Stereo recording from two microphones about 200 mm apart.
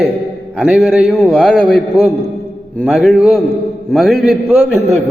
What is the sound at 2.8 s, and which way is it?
A man's voice, 5° right (ahead or behind).